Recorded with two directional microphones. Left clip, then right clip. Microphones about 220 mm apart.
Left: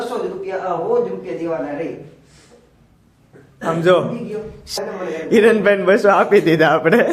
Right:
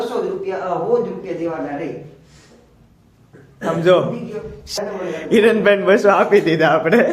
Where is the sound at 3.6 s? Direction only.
15° left (ahead or behind).